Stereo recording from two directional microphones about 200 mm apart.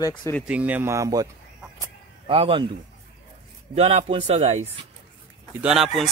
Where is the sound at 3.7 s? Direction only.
30° right (ahead or behind).